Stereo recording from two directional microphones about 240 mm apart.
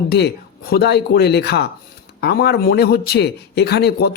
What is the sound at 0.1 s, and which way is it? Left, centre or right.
Speech, left.